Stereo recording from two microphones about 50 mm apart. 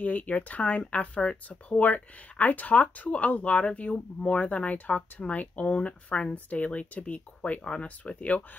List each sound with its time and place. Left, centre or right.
0.0 s speech: left
1.8 s speech: left